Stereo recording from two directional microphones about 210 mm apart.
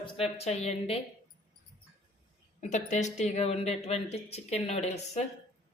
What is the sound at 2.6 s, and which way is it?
A woman's voice, 35° left (ahead or behind).